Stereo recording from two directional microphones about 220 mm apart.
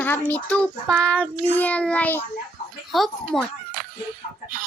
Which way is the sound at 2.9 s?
Centre (ahead or behind).